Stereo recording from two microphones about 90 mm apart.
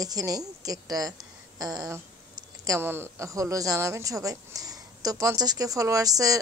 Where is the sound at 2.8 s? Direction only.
25° right (ahead or behind); by 6.4 s 40° right (ahead or behind).